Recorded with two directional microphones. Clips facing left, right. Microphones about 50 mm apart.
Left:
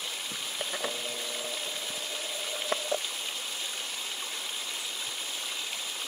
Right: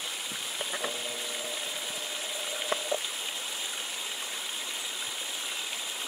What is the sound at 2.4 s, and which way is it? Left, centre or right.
Stream, centre.